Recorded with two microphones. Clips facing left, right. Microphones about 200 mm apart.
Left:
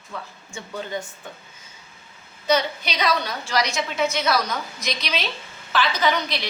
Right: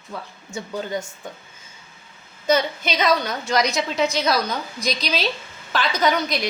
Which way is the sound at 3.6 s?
35° right (ahead or behind).